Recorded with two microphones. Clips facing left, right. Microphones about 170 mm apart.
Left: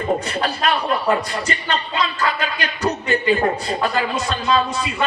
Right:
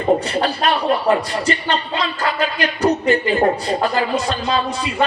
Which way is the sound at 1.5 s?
35° right (ahead or behind).